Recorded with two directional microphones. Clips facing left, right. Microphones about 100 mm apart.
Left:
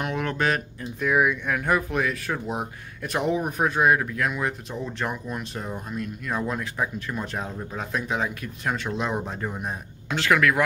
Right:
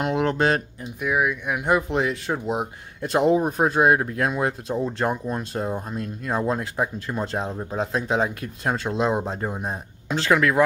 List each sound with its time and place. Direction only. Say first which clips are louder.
0.0 s a sound: right 4 dB; 25° right (ahead or behind)
1.0 s speech: left 1 dB; 5° right (ahead or behind)
1.6 s speech: right 4 dB; 25° right (ahead or behind)